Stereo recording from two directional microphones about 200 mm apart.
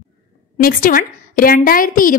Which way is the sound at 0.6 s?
45° left (ahead or behind).